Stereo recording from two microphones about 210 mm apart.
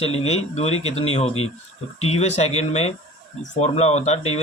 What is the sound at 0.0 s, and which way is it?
Speech, 30° left (ahead or behind).